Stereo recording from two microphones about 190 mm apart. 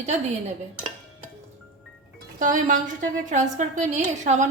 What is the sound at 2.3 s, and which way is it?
Speech, 45° right (ahead or behind).